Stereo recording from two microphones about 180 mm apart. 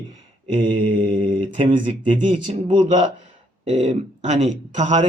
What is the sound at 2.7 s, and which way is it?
Speech, 40° right (ahead or behind).